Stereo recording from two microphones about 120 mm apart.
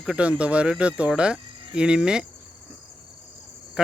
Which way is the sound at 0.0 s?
10° right (ahead or behind).